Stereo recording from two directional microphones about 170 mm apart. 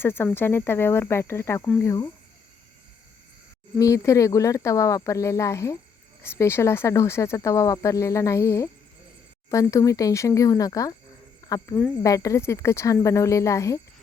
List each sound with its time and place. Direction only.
0.0 s speech: 15° left (ahead or behind)
3.8 s speech: 20° left (ahead or behind)